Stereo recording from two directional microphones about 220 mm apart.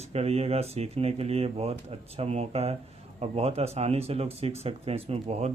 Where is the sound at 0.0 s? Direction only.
30° right (ahead or behind).